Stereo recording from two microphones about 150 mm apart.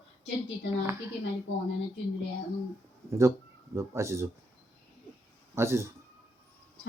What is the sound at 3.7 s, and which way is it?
Speech, 20° right (ahead or behind).